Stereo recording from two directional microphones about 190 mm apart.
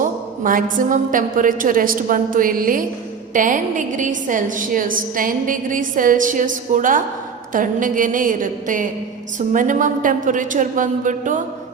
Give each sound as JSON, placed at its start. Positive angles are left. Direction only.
{"t": 0.0, "sound": "a woman's voice", "side_deg": -45}